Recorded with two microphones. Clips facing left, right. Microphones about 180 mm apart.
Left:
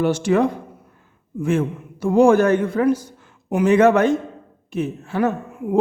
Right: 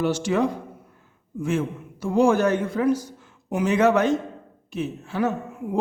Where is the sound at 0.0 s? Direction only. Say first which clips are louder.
Left 4 dB; 55° left (ahead or behind).